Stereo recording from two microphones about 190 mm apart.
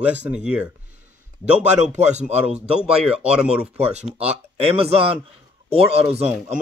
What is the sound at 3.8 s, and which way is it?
Speech, 35° right (ahead or behind).